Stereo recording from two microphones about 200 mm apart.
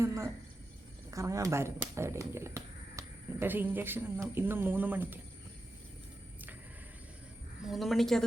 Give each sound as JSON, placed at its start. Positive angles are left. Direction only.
{"t": 0.0, "sound": "a sound", "side_deg": -15}
{"t": 1.1, "sound": "speech", "side_deg": -15}
{"t": 7.6, "sound": "a woman's voice", "side_deg": 0}